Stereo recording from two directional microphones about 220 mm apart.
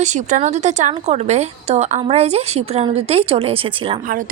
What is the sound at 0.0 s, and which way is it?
A woman's voice, 35° right (ahead or behind).